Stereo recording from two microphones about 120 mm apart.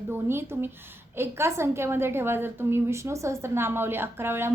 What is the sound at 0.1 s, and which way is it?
A woman's voice, 20° right (ahead or behind).